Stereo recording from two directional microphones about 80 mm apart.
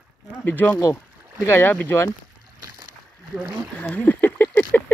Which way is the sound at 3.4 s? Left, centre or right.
Right.